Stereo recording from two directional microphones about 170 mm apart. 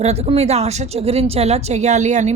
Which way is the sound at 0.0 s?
40° right (ahead or behind).